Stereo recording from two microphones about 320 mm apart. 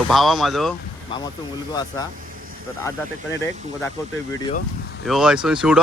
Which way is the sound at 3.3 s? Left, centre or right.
Centre.